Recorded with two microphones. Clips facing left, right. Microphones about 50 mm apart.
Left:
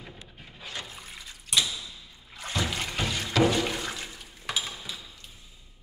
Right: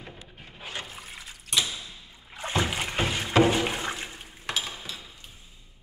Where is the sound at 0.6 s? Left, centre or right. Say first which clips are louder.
Right 2 dB; right.